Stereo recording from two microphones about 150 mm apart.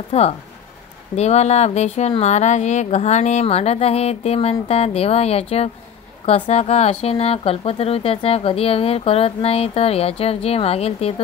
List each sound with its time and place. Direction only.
0.1 s speech: 45° left (ahead or behind)